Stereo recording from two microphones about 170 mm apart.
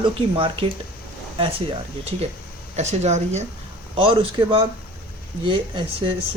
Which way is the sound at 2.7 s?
40° right (ahead or behind).